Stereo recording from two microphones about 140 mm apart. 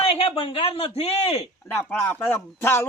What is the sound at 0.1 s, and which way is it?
Speech, 40° left (ahead or behind).